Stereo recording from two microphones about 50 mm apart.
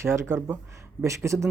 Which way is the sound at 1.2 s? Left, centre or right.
Right.